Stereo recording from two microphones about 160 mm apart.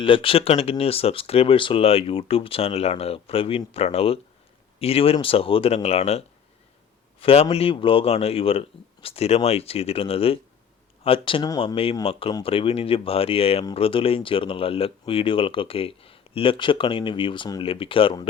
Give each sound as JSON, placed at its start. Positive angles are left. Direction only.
{"t": 0.0, "sound": "a man's voice", "side_deg": 35}